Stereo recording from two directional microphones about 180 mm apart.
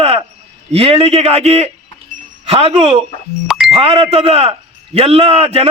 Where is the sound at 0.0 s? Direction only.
35° right (ahead or behind).